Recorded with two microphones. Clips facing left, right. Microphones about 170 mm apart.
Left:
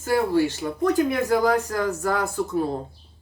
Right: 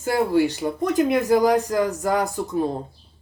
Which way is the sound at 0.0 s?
15° right (ahead or behind).